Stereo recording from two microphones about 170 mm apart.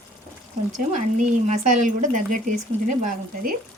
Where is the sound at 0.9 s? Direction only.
45° right (ahead or behind).